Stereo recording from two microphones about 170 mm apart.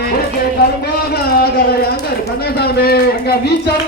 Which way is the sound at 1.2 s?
65° left (ahead or behind).